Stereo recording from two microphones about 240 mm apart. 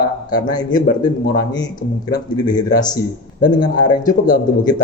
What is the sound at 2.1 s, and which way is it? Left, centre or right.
Speech, centre.